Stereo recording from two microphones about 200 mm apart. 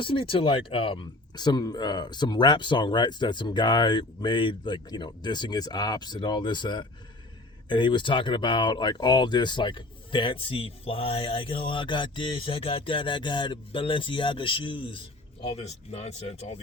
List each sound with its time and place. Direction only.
0.0 s speech: 25° left (ahead or behind)